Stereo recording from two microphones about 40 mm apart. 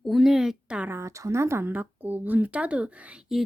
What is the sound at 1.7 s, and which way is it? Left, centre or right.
Speech, right.